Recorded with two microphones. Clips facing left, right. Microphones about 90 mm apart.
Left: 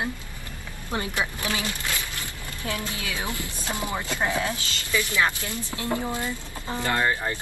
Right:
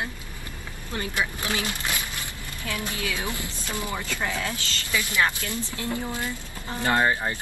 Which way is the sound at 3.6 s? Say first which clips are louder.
Left 2 dB; 20° left (ahead or behind).